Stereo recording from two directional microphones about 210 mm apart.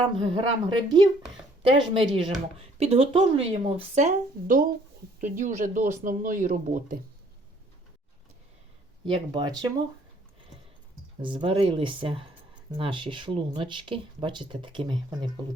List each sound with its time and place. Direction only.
0.3 s speech: 20° right (ahead or behind); by 7.0 s 40° right (ahead or behind)
9.0 s speech: 25° right (ahead or behind)
11.2 s speech: 25° right (ahead or behind)